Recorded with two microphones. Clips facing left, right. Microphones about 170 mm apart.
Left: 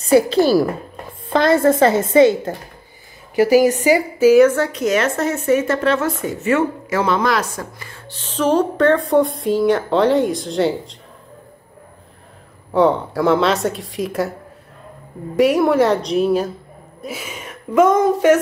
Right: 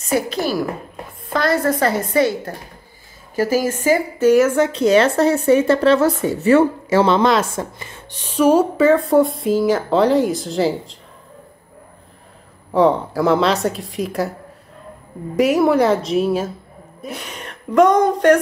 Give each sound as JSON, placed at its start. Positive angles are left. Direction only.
{"t": 0.0, "sound": "a woman's voice", "side_deg": 30}
{"t": 4.5, "sound": "speech", "side_deg": -20}
{"t": 4.7, "sound": "speech", "side_deg": -30}
{"t": 12.7, "sound": "speech", "side_deg": 0}
{"t": 15.3, "sound": "speech", "side_deg": 0}